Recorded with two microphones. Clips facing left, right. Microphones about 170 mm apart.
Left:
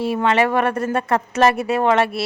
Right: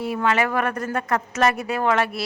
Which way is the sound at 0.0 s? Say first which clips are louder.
Left 4 dB; 25° left (ahead or behind).